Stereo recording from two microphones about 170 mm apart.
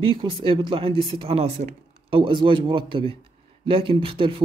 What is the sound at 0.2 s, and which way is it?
Speech, 30° right (ahead or behind).